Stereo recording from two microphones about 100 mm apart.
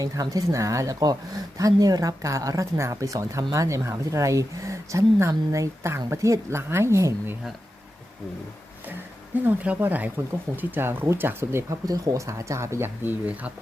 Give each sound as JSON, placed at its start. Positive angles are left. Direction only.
{"t": 0.0, "sound": "a woman's voice", "side_deg": -35}
{"t": 9.4, "sound": "a woman's voice", "side_deg": -20}